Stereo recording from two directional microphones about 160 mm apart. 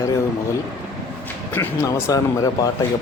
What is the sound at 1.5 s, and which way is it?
Speech, 15° left (ahead or behind).